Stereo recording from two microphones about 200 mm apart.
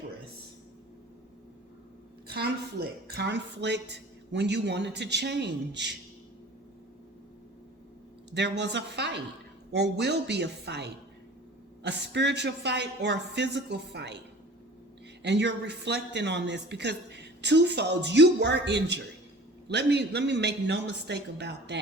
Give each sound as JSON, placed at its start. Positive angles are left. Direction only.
{"t": 2.2, "sound": "a man's voice", "side_deg": -55}
{"t": 8.3, "sound": "a man's voice", "side_deg": -60}
{"t": 15.2, "sound": "a man's voice", "side_deg": -60}